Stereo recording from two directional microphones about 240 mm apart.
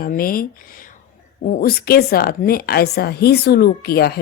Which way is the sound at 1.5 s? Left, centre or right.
Left.